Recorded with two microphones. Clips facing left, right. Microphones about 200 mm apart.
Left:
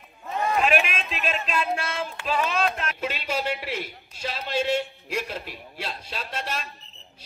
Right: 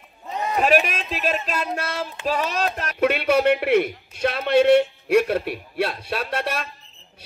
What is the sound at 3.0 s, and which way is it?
A man's voice, 65° right (ahead or behind).